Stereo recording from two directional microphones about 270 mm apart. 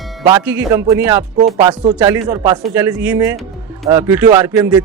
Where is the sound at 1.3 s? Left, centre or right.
Right.